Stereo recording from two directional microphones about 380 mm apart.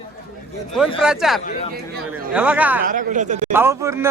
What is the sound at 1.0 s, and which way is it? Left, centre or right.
Speech, centre.